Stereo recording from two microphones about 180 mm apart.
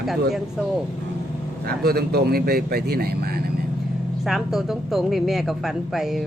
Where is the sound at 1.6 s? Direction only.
55° right (ahead or behind).